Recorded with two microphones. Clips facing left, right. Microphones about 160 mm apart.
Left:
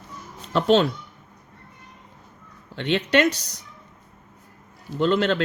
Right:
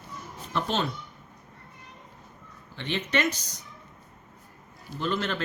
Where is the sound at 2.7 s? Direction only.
70° left (ahead or behind).